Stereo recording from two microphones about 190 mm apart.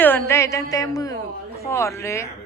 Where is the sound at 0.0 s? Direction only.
10° left (ahead or behind).